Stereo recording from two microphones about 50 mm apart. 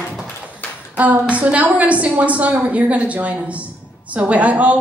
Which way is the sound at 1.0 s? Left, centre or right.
Right.